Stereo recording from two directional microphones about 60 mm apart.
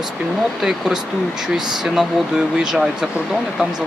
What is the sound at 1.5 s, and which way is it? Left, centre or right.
Speech, centre.